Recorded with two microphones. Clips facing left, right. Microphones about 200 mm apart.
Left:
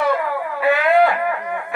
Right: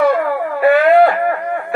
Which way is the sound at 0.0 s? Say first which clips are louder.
Right 6 dB; 50° right (ahead or behind).